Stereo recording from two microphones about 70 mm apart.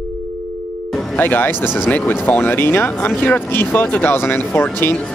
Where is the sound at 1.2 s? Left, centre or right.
Left.